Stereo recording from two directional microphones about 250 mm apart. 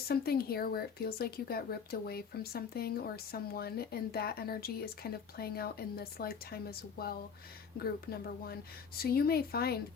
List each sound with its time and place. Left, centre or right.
0.1 s speech: left